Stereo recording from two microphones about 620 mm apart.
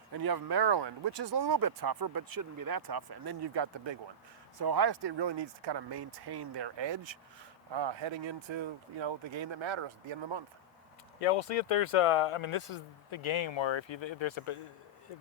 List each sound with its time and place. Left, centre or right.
0.1 s speech: right
11.2 s speech: left